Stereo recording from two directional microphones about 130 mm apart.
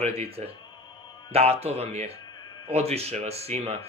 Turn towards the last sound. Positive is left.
turn(degrees=-50)  # may be behind; listen again after turning